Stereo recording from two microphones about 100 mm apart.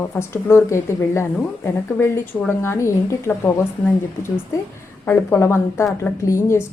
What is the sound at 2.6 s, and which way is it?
Speech, 25° left (ahead or behind).